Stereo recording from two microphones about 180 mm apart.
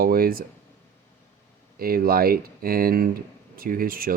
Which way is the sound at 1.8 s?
55° right (ahead or behind).